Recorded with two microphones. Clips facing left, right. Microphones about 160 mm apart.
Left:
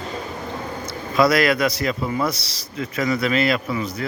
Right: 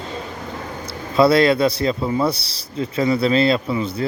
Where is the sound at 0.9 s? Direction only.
30° right (ahead or behind).